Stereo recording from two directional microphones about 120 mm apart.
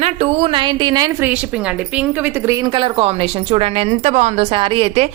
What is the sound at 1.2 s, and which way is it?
A woman's voice, 10° right (ahead or behind).